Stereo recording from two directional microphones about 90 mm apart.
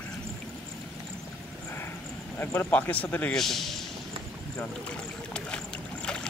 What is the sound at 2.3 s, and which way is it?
Speech, 20° left (ahead or behind).